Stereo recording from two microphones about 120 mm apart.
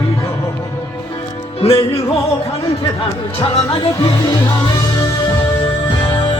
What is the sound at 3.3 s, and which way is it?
Speech, 55° left (ahead or behind).